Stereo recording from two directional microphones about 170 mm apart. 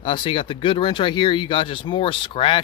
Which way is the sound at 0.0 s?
30° left (ahead or behind).